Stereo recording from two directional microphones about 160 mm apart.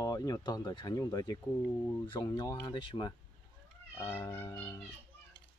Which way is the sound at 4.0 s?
15° left (ahead or behind).